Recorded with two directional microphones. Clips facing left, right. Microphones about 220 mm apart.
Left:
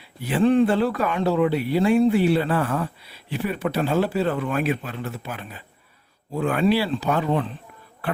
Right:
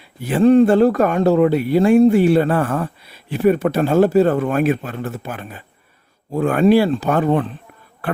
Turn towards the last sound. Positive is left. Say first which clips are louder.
# right 5 dB
turn(degrees=-50)  # may be behind; listen again after turning